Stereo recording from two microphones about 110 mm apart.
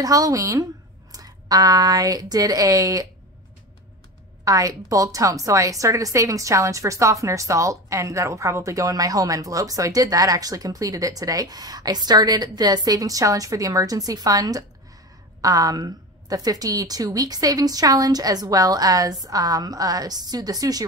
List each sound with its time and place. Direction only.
0.0 s a woman's voice: 35° right (ahead or behind)
4.5 s a woman's voice: 30° right (ahead or behind)